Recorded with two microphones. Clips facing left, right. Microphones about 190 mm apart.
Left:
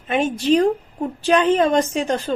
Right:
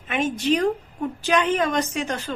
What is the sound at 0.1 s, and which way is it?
A woman's voice, 30° left (ahead or behind).